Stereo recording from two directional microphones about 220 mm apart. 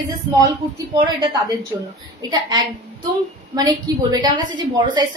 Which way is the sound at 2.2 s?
20° right (ahead or behind).